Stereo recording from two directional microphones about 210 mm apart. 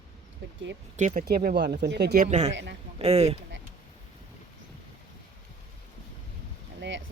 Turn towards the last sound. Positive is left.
turn(degrees=-60)  # may be behind; listen again after turning